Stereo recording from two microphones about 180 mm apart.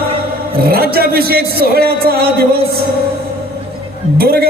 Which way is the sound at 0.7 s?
55° right (ahead or behind).